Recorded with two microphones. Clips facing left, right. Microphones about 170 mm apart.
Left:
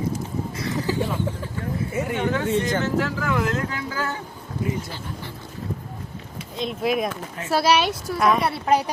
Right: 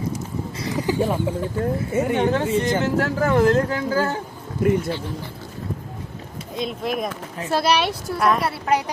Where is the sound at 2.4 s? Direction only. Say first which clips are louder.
Right 2 dB; centre (ahead or behind).